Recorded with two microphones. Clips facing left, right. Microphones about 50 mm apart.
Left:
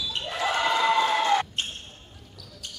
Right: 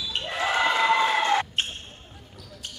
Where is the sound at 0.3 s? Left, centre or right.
Right.